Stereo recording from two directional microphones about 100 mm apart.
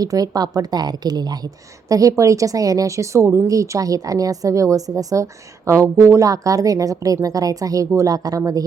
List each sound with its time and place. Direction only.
0.0 s speech: 40° right (ahead or behind)